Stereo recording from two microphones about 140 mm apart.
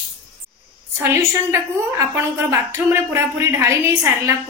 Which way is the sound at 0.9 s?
20° right (ahead or behind).